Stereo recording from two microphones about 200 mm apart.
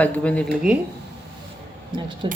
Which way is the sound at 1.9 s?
25° right (ahead or behind).